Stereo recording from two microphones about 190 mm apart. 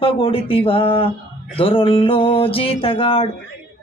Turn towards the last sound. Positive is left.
turn(degrees=30)  # may be behind; listen again after turning